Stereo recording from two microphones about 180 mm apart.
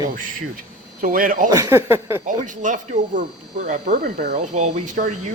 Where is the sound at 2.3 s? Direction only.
45° right (ahead or behind).